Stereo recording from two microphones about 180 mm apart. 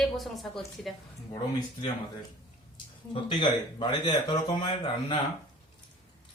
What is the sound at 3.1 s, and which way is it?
Speech, 25° left (ahead or behind).